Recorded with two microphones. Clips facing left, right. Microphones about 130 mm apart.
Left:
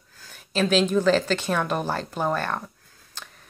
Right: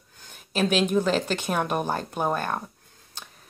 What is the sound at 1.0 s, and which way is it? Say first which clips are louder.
Speech: left 3 dB; 30° right (ahead or behind).